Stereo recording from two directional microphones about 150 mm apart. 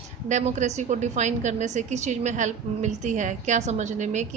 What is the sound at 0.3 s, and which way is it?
A woman's voice, 50° right (ahead or behind).